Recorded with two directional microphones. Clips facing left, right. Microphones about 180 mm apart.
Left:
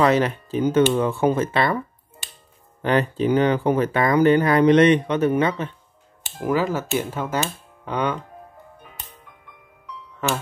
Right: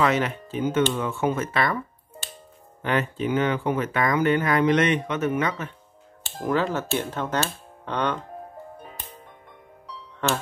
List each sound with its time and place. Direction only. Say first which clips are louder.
0.0 s speech: left 4 dB; 35° left (ahead or behind)
2.2 s music: right 4 dB; 15° left (ahead or behind)
2.8 s speech: left 5 dB; 35° left (ahead or behind)
6.4 s speech: left 2 dB; 10° left (ahead or behind)